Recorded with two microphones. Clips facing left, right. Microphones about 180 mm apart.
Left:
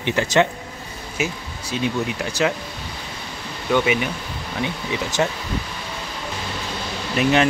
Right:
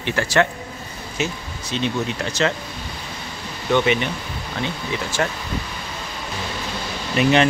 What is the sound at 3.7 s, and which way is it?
Speech, 5° left (ahead or behind).